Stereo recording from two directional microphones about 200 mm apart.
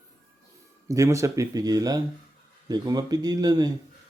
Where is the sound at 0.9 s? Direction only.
15° right (ahead or behind).